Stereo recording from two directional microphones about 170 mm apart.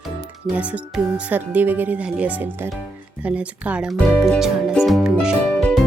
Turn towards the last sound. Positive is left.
turn(degrees=5)  # may be behind; listen again after turning